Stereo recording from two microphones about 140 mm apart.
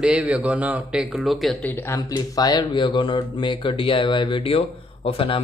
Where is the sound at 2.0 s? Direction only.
25° left (ahead or behind).